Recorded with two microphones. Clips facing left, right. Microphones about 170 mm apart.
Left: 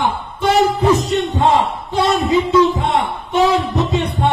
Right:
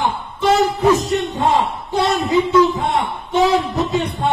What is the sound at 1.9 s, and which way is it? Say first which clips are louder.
Music: left 1 dB; 25° left (ahead or behind).